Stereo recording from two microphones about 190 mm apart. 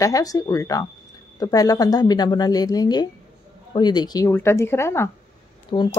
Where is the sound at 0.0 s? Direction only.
20° left (ahead or behind).